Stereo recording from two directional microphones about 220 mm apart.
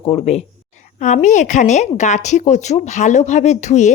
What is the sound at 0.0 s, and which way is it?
A woman's voice, 25° left (ahead or behind).